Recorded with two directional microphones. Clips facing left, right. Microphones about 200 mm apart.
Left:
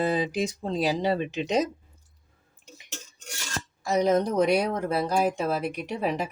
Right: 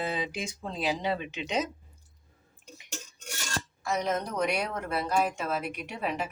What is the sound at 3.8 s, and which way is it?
Speech, 35° left (ahead or behind).